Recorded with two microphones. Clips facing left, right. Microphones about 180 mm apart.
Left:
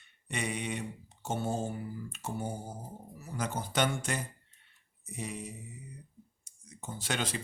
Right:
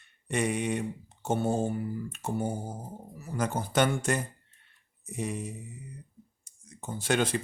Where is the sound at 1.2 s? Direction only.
55° right (ahead or behind).